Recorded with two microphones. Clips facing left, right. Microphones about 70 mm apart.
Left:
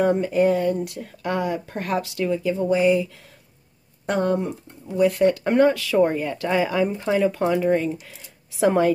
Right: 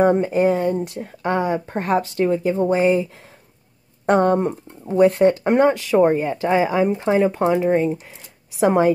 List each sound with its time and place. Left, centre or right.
0.0 s speech: right